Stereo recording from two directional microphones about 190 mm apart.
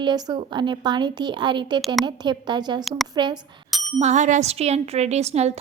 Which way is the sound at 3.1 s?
25° right (ahead or behind).